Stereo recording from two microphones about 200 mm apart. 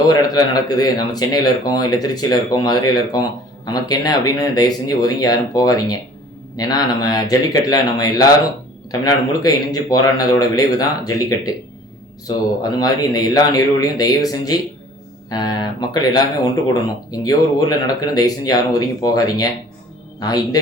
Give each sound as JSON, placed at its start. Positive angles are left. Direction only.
{"t": 0.1, "sound": "a man's voice", "side_deg": 20}
{"t": 12.7, "sound": "speech", "side_deg": 20}